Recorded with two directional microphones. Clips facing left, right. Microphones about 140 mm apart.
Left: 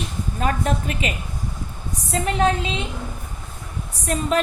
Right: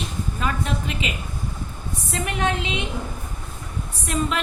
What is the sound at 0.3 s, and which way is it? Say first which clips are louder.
Speech: left 4 dB; 45° left (ahead or behind).